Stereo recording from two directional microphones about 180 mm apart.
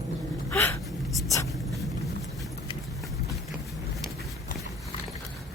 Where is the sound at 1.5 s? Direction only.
Centre (ahead or behind).